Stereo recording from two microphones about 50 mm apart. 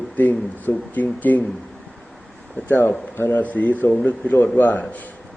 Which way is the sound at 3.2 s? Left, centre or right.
Left.